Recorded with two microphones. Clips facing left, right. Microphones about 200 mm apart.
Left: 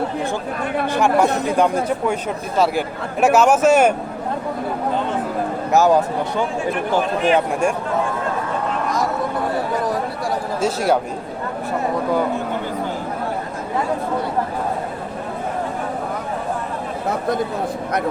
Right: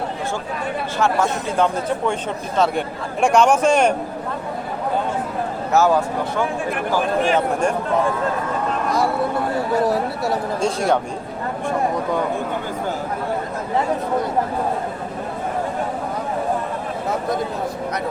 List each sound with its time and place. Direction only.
0.9 s a man's voice: 15° left (ahead or behind)
5.7 s a man's voice: 15° left (ahead or behind)
10.6 s speech: 5° left (ahead or behind)